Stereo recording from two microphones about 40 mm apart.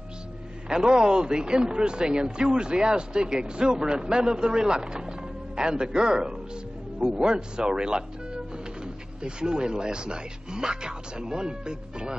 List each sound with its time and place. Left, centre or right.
0.7 s speech: centre